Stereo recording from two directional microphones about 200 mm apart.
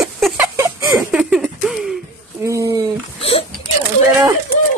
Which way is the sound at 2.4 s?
15° right (ahead or behind).